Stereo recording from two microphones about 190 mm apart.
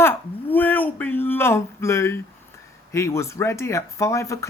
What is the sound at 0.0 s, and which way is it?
Speech, 10° left (ahead or behind).